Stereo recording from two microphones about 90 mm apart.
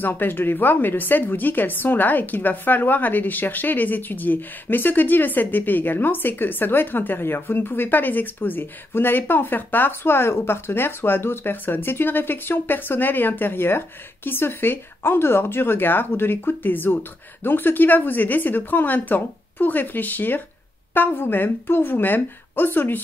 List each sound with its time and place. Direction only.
0.0 s a woman's voice: 20° left (ahead or behind)